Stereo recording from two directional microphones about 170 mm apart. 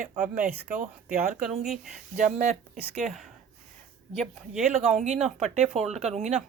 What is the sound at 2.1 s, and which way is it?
Speech, 50° right (ahead or behind).